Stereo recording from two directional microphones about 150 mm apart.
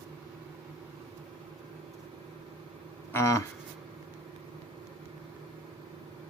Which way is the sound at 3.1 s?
20° left (ahead or behind).